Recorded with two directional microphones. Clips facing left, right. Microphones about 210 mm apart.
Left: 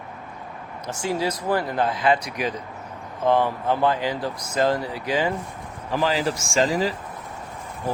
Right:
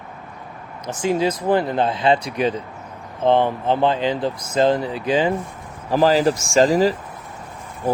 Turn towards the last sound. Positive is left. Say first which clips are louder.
# right 6 dB
turn(degrees=-40)  # may be behind; listen again after turning